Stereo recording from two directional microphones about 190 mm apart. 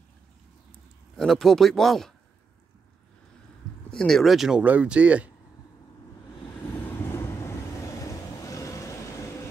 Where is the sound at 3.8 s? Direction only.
5° left (ahead or behind).